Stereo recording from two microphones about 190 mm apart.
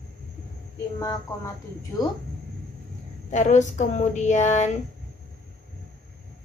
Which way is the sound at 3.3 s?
40° left (ahead or behind).